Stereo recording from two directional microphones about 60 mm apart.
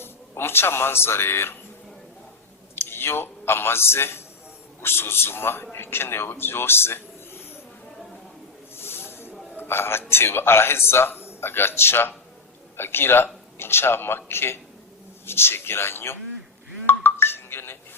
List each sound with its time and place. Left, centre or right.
0.0 s speech: left
2.7 s a man's voice: left
8.7 s snake: left
9.6 s a man's voice: left
16.8 s music: left